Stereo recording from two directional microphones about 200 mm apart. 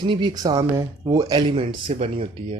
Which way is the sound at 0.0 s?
25° right (ahead or behind).